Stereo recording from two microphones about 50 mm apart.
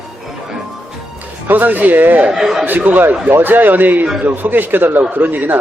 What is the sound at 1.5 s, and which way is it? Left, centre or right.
Speech, right.